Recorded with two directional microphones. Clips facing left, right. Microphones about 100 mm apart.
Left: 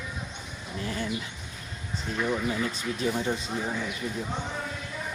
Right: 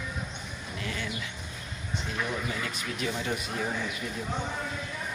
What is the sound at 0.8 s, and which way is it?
Speech, 35° left (ahead or behind).